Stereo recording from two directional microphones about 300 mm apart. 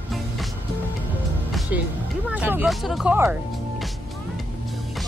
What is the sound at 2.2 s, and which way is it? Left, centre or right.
Speech, centre.